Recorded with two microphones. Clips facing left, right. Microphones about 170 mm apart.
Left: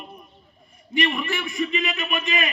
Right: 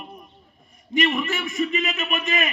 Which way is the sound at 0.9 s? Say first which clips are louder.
Right 2 dB; 45° right (ahead or behind).